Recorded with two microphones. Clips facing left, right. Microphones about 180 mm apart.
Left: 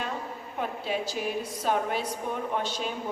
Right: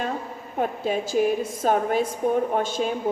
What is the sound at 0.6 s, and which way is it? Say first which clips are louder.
A woman's voice: right 6 dB; 45° right (ahead or behind).